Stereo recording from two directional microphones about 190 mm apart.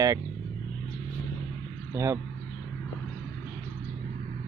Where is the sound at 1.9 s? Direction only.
15° right (ahead or behind).